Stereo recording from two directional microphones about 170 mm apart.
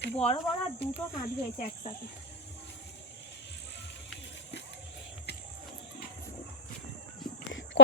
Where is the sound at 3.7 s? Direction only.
90° left.